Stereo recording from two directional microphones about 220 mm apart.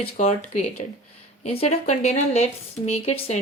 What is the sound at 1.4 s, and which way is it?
Speech, 30° left (ahead or behind).